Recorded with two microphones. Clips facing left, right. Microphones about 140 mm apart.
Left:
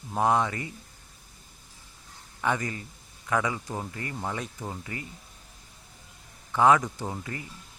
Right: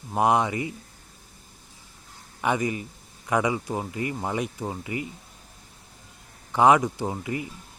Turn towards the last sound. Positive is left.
turn(degrees=-15)  # may be behind; listen again after turning